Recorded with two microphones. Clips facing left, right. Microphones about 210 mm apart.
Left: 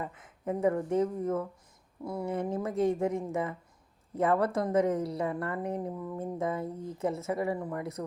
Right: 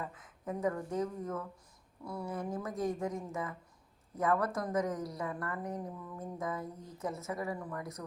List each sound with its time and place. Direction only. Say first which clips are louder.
0.0 s a woman's voice: left 5 dB; 25° left (ahead or behind)